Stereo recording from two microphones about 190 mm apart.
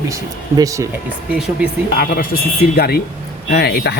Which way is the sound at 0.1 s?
15° right (ahead or behind).